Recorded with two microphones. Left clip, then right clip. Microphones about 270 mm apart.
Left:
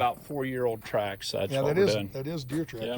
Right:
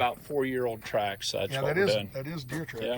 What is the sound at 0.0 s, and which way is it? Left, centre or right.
Speech, left.